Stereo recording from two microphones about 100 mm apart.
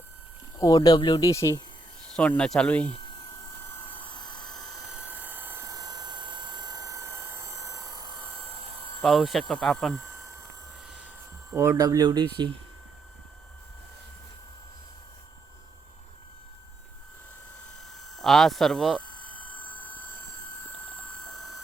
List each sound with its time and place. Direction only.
0.8 s speech: 50° left (ahead or behind)
1.3 s speech: 30° left (ahead or behind)
2.0 s speech: 10° left (ahead or behind)
3.6 s vehicle: 25° left (ahead or behind)
4.2 s helicopter: 5° left (ahead or behind); by 5.6 s 20° right (ahead or behind)
5.6 s a sound: 40° right (ahead or behind)
9.0 s speech: centre (ahead or behind)
11.5 s speech: 25° right (ahead or behind)
11.8 s speech: 40° right (ahead or behind)
18.2 s speech: centre (ahead or behind)
19.5 s vehicle: 15° left (ahead or behind)
20.7 s a sound: 15° left (ahead or behind)